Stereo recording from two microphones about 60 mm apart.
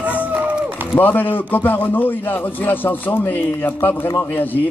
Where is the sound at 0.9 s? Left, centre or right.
Left.